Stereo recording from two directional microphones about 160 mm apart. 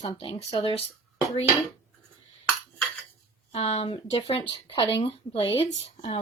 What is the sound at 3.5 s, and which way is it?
Speech, 40° left (ahead or behind).